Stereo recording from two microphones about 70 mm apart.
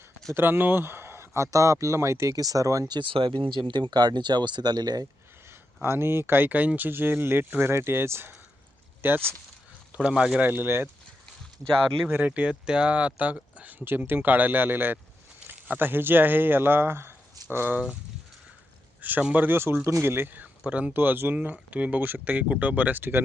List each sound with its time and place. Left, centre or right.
0.3 s speech: right
2.9 s speech: right
5.8 s speech: right
9.9 s speech: centre
10.4 s speech: right
12.1 s speech: right
19.2 s speech: right
21.0 s speech: right